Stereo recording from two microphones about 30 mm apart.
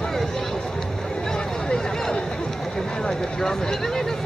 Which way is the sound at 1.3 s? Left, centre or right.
Left.